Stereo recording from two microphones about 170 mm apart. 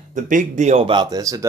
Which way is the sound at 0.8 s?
25° right (ahead or behind).